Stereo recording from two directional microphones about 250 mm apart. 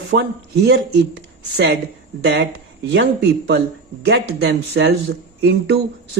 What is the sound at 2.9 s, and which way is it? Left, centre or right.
Speech, right.